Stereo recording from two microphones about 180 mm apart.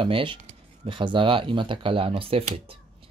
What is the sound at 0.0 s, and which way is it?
Speech, 25° right (ahead or behind).